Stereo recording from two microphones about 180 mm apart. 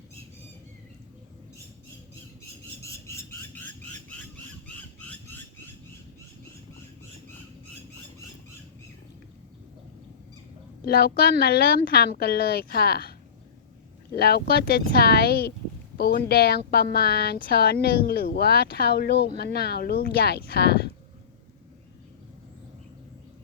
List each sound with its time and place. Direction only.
2.8 s a sound: 15° left (ahead or behind)
4.6 s squawk: 10° left (ahead or behind)
10.8 s speech: 60° left (ahead or behind)